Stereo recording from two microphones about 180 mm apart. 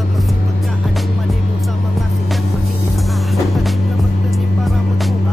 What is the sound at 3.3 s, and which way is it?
Music, centre (ahead or behind).